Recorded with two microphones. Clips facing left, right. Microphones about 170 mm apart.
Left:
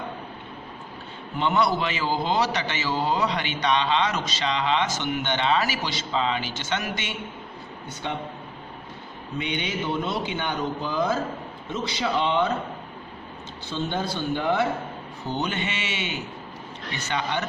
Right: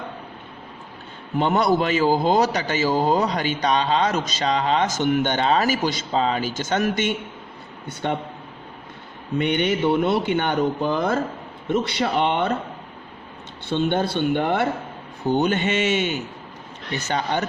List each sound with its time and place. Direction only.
1.4 s a man's voice: 45° right (ahead or behind)
8.0 s speech: 55° right (ahead or behind)
9.4 s speech: 55° right (ahead or behind)
13.7 s speech: 65° right (ahead or behind)
15.3 s a man's voice: 50° right (ahead or behind)